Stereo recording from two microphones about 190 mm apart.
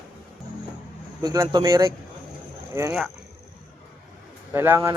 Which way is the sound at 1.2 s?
20° right (ahead or behind).